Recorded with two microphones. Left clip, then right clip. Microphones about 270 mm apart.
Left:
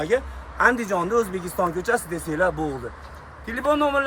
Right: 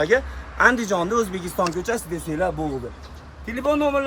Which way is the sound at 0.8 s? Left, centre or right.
Centre.